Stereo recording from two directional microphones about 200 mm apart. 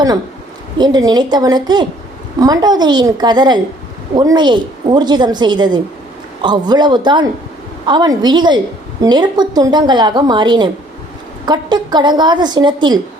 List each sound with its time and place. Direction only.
0.8 s a woman's voice: 20° right (ahead or behind)